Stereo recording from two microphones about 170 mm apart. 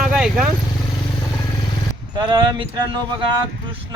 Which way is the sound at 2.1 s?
30° right (ahead or behind).